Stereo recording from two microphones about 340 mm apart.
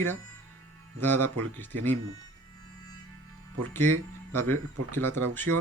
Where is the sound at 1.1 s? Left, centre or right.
Right.